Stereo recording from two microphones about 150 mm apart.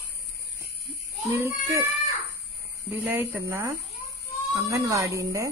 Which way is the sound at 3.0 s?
15° right (ahead or behind).